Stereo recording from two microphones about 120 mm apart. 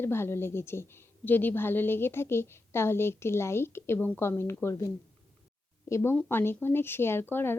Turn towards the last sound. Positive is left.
turn(degrees=20)  # may be behind; listen again after turning